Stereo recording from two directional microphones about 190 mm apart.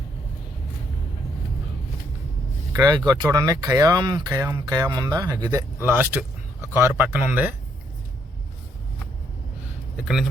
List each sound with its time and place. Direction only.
2.7 s speech: 20° right (ahead or behind)